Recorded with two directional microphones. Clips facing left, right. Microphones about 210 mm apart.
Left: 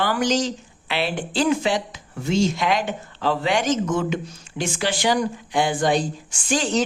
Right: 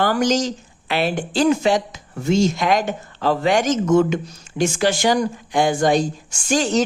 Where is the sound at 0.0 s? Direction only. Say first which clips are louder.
Right 3 dB; 45° right (ahead or behind).